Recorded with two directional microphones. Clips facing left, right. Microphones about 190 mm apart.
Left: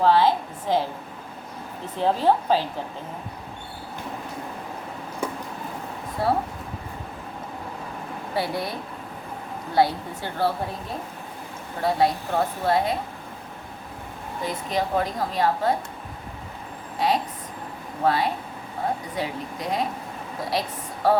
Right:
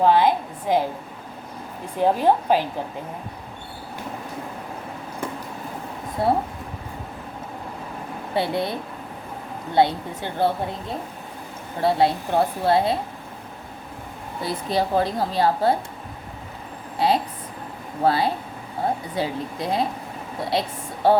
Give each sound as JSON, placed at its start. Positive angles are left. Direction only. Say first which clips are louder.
{"t": 0.0, "sound": "a woman's voice", "louder": "right 1 dB", "side_deg": -15}
{"t": 2.0, "sound": "a woman's voice", "louder": "right 2 dB", "side_deg": -15}
{"t": 6.2, "sound": "a woman's voice", "louder": "right 2 dB", "side_deg": -25}
{"t": 8.4, "sound": "a woman's voice", "louder": "right 4 dB", "side_deg": -25}
{"t": 9.7, "sound": "a woman's voice", "louder": "right 2 dB", "side_deg": -20}
{"t": 11.8, "sound": "a woman's voice", "louder": "right 2 dB", "side_deg": -30}
{"t": 14.4, "sound": "a woman's voice", "louder": "right 3 dB", "side_deg": -35}
{"t": 17.0, "sound": "a sound", "louder": "right 3 dB", "side_deg": -30}
{"t": 18.0, "sound": "a woman's voice", "louder": "right 2 dB", "side_deg": -30}